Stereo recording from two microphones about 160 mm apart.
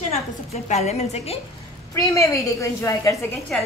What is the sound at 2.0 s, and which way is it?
A woman's voice, 20° left (ahead or behind).